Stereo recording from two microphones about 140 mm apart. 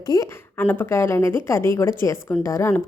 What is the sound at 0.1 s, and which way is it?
Speech, 25° left (ahead or behind).